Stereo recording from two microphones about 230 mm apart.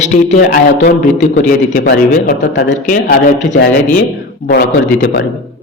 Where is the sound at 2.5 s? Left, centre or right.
Left.